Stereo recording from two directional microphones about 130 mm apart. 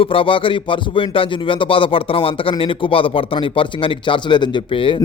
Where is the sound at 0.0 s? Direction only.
45° left (ahead or behind).